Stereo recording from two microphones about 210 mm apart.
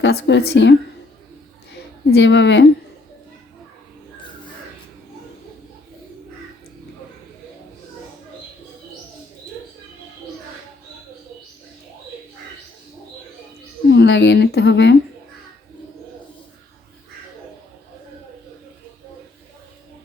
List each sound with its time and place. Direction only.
0.0 s a woman's voice: 55° left (ahead or behind)
2.0 s a woman's voice: 55° left (ahead or behind)
13.9 s speech: 55° left (ahead or behind)